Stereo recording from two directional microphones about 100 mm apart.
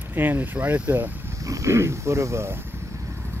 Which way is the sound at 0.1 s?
20° right (ahead or behind).